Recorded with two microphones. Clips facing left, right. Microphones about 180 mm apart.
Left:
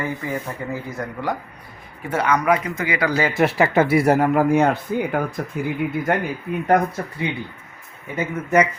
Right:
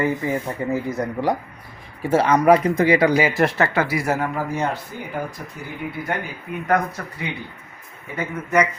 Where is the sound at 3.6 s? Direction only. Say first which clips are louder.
Left 4 dB; 25° left (ahead or behind).